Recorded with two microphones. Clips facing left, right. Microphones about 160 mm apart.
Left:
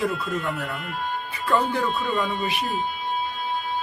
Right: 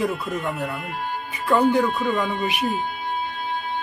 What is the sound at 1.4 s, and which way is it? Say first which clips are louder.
Speech: right 5 dB; 20° right (ahead or behind).